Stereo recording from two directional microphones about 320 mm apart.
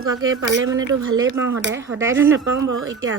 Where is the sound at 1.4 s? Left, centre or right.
Centre.